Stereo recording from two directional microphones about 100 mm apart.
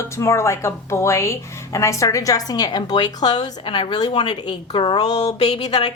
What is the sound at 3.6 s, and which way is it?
A woman's voice, 60° left (ahead or behind).